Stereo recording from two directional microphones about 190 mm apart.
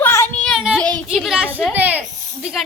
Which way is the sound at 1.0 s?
5° right (ahead or behind).